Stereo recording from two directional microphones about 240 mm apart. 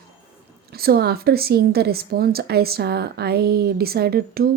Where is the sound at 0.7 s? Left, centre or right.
Right.